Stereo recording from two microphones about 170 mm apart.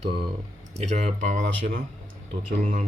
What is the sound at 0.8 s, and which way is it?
Speech, 45° right (ahead or behind).